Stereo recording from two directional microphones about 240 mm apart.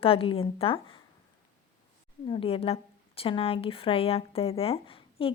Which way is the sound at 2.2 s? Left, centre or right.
Left.